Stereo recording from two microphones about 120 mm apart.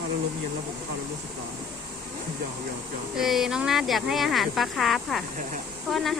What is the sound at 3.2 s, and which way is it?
Speech, 5° right (ahead or behind).